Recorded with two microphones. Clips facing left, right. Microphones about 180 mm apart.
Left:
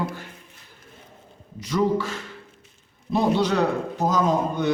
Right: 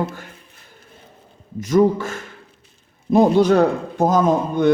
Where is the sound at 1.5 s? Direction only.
50° right (ahead or behind).